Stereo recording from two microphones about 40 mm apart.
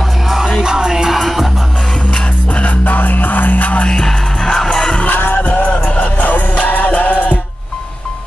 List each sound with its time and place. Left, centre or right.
0.6 s music: centre
1.1 s music: centre
2.5 s music: left
4.0 s music: centre
5.0 s music: left
5.4 s music: left